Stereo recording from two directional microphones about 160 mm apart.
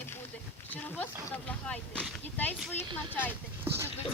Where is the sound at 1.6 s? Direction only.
5° left (ahead or behind).